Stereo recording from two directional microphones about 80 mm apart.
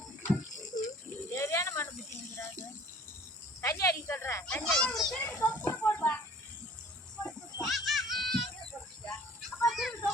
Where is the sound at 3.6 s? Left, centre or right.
Left.